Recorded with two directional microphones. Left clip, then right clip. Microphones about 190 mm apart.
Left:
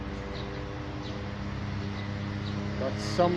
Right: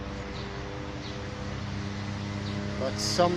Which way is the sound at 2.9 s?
10° right (ahead or behind).